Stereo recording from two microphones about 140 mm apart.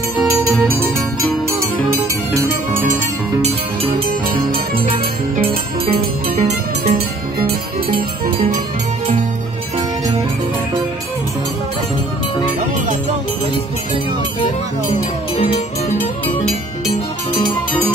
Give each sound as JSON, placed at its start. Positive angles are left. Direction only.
{"t": 0.3, "sound": "music", "side_deg": -20}
{"t": 5.9, "sound": "music", "side_deg": -50}